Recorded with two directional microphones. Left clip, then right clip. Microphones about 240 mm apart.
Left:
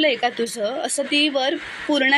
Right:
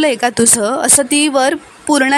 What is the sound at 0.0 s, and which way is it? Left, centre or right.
A woman's voice, right.